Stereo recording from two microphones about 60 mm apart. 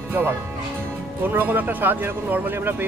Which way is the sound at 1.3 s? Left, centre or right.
Right.